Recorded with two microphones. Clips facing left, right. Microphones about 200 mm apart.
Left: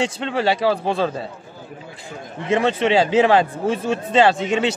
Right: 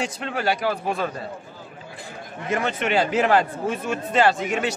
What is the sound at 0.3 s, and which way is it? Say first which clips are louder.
Speech: left 5 dB; 30° left (ahead or behind).